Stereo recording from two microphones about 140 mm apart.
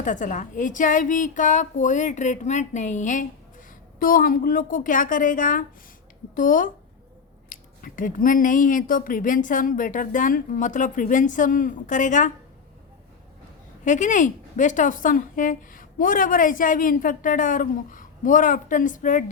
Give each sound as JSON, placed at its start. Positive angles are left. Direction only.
{"t": 0.0, "sound": "a woman's voice", "side_deg": 65}
{"t": 4.0, "sound": "a woman's voice", "side_deg": 85}
{"t": 13.8, "sound": "a woman's voice", "side_deg": 60}